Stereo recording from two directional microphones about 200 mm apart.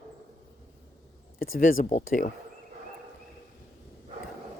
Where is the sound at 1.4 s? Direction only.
45° left (ahead or behind).